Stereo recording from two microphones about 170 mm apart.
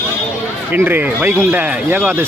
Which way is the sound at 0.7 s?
10° right (ahead or behind).